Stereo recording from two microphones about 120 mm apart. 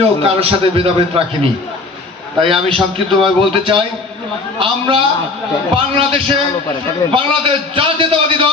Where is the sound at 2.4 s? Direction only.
50° right (ahead or behind).